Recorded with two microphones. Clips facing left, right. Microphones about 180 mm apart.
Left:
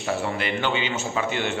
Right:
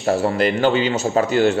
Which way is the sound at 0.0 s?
35° right (ahead or behind).